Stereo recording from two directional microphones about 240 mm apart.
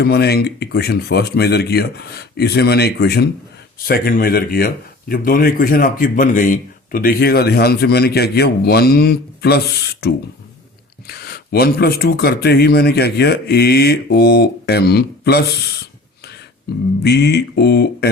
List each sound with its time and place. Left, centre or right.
0.0 s speech: left
17.0 s speech: left